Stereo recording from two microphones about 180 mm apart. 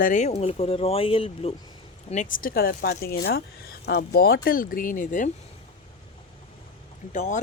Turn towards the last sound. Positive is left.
turn(degrees=45)  # may be behind; listen again after turning